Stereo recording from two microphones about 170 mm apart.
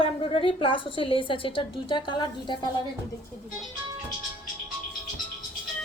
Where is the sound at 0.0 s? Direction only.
35° left (ahead or behind).